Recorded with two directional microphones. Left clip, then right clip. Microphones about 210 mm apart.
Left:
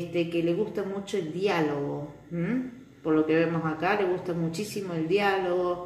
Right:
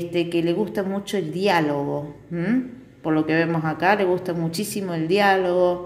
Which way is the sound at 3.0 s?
55° right (ahead or behind).